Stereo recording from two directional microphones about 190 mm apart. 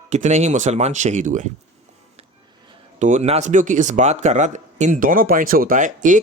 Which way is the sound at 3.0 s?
40° right (ahead or behind).